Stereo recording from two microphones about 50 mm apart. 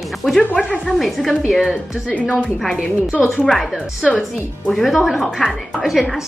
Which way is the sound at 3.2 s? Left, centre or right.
Centre.